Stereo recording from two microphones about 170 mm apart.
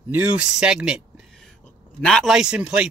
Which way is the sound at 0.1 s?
10° right (ahead or behind).